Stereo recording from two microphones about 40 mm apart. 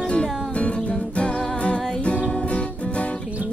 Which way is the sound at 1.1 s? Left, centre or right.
Left.